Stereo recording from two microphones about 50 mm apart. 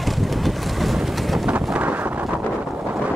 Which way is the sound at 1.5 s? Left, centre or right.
Right.